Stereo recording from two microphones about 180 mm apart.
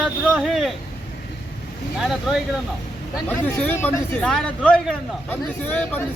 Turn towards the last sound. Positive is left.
turn(degrees=10)  # may be behind; listen again after turning